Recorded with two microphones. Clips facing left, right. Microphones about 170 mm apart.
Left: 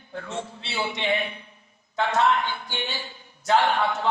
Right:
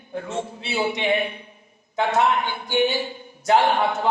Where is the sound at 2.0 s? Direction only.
15° right (ahead or behind).